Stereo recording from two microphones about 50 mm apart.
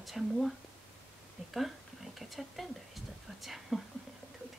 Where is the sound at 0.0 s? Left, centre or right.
Centre.